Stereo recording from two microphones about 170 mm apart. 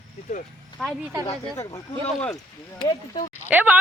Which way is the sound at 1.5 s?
20° left (ahead or behind).